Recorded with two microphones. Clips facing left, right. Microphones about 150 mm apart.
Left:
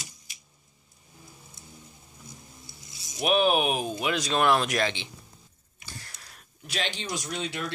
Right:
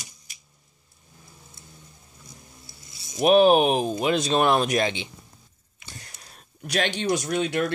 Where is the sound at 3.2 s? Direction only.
40° right (ahead or behind); by 5.1 s 20° right (ahead or behind).